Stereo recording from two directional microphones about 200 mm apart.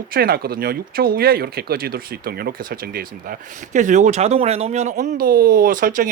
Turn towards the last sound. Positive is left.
turn(degrees=-45)  # may be behind; listen again after turning